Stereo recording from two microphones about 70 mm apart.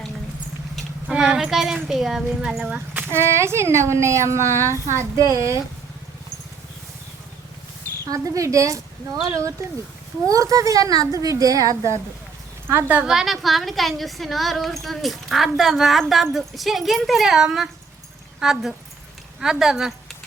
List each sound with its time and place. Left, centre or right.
1.1 s speech: centre
3.1 s speech: right
8.1 s a woman's voice: right
12.6 s speech: right
13.1 s a woman's voice: centre